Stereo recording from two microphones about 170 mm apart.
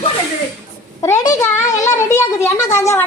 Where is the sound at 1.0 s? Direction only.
20° left (ahead or behind).